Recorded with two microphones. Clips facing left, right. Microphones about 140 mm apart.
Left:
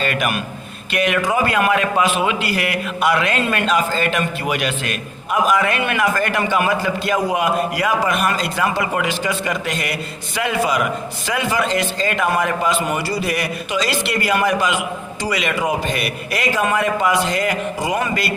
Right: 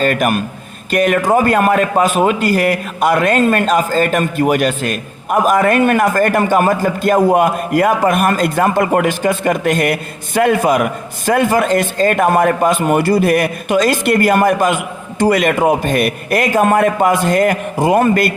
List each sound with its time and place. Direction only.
0.0 s a man's voice: 45° right (ahead or behind)